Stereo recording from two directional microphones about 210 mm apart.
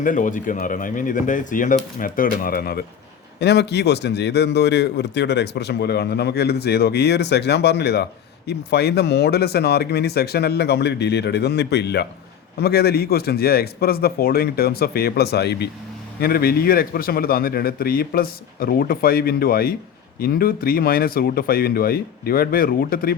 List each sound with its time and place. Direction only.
0.0 s a man's voice: 40° left (ahead or behind)